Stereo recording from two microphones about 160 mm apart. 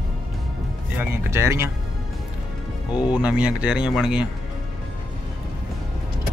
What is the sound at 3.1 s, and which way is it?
Speech, 5° right (ahead or behind).